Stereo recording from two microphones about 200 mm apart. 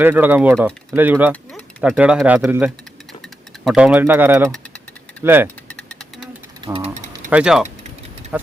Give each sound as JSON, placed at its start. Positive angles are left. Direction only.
{"t": 0.0, "sound": "speech", "side_deg": -10}
{"t": 4.4, "sound": "engine", "side_deg": 5}
{"t": 5.2, "sound": "speech", "side_deg": -10}
{"t": 5.6, "sound": "insect", "side_deg": 5}
{"t": 6.6, "sound": "speech", "side_deg": -25}
{"t": 7.3, "sound": "speech", "side_deg": -5}